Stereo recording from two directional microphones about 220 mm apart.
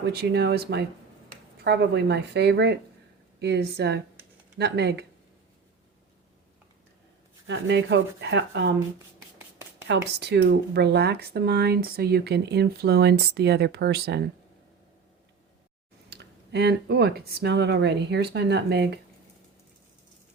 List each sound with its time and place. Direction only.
0.0 s speech: 45° right (ahead or behind)
7.4 s speech: 55° right (ahead or behind)
9.8 s speech: 50° right (ahead or behind)
16.0 s speech: 50° right (ahead or behind)